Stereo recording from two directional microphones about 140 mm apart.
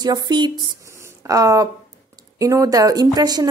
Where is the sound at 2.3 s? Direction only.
25° right (ahead or behind).